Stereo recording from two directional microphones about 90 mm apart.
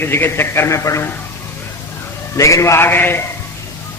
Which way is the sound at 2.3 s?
35° left (ahead or behind).